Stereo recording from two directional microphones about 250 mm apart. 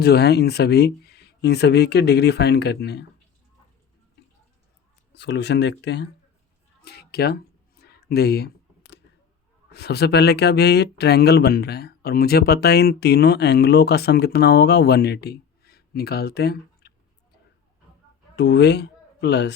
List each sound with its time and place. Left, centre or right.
0.0 s speech: left
5.1 s speech: left
7.8 s a sound: left
9.7 s speech: left
18.3 s speech: left